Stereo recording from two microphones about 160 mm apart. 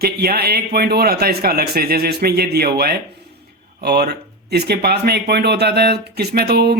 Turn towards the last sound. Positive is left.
turn(degrees=-85)